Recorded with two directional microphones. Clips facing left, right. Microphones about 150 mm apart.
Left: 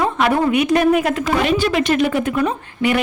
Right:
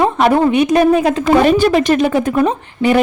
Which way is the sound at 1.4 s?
40° right (ahead or behind).